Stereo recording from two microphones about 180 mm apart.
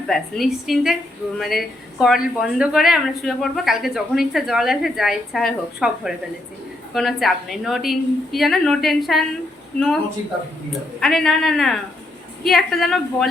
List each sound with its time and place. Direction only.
0.1 s speech: centre (ahead or behind)